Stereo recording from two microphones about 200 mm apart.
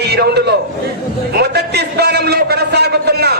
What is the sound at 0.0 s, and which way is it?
Speech, 55° right (ahead or behind).